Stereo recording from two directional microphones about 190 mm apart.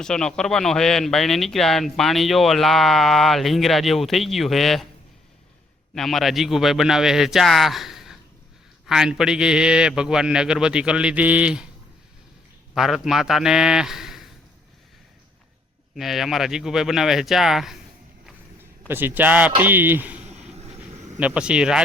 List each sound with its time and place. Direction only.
0.0 s speech: 5° left (ahead or behind)
5.9 s speech: centre (ahead or behind)
12.7 s speech: centre (ahead or behind)
16.0 s speech: centre (ahead or behind)
18.9 s a man's voice: 10° right (ahead or behind)
20.2 s a sound: 35° right (ahead or behind)
21.2 s speech: 5° right (ahead or behind)